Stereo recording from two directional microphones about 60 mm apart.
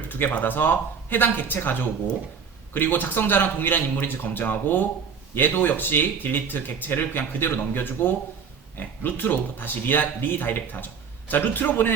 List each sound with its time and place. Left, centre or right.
0.1 s speech: left